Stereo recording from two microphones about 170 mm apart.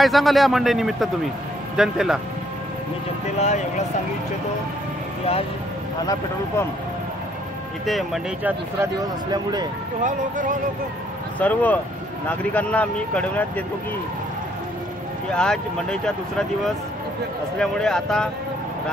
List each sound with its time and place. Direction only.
0.0 s speech: centre (ahead or behind)
3.3 s speech: 45° left (ahead or behind)
7.8 s speech: centre (ahead or behind)
9.0 s speech: 25° right (ahead or behind)
10.0 s speech: 50° right (ahead or behind)
11.3 s speech: 10° left (ahead or behind)
15.3 s speech: 5° left (ahead or behind)